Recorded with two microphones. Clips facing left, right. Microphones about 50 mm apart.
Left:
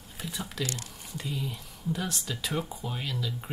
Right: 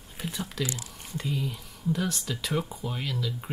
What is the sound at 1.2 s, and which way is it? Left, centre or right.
Speech, centre.